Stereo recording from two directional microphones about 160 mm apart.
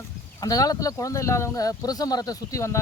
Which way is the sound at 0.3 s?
20° left (ahead or behind).